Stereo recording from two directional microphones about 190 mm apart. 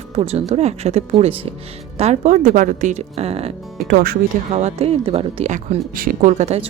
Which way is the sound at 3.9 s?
50° right (ahead or behind).